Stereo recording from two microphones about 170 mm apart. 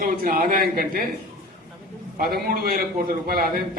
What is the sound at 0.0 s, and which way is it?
A man's voice, 55° right (ahead or behind).